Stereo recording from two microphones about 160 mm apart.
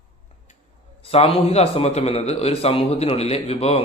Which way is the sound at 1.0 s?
40° left (ahead or behind).